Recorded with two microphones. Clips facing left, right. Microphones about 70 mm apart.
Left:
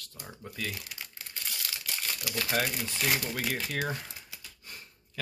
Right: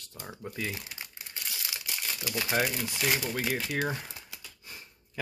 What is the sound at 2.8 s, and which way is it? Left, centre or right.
Speech, centre.